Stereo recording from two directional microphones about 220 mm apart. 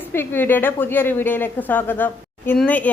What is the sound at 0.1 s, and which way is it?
A woman's voice, 10° left (ahead or behind).